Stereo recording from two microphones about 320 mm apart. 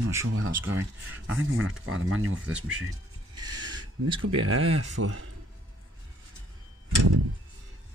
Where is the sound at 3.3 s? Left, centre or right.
Centre.